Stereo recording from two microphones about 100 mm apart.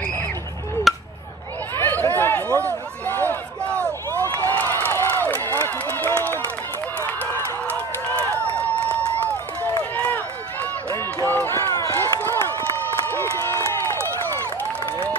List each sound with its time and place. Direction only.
0.9 s chop: centre (ahead or behind)
1.8 s a sound: 20° left (ahead or behind)
3.1 s run: 20° left (ahead or behind)
3.7 s a sound: 30° right (ahead or behind)
4.3 s run: 20° left (ahead or behind)
4.8 s crowd: 20° left (ahead or behind)
5.3 s run: 20° left (ahead or behind)
9.9 s run: 20° left (ahead or behind)
13.4 s run: 25° left (ahead or behind)